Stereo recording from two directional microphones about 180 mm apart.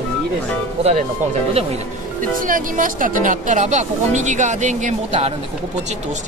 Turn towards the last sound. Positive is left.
turn(degrees=-40)  # may be behind; listen again after turning